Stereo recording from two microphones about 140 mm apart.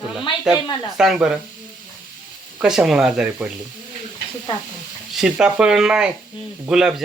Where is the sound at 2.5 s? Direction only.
5° right (ahead or behind).